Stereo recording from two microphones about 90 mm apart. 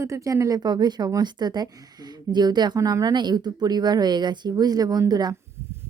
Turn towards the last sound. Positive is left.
turn(degrees=-45)  # may be behind; listen again after turning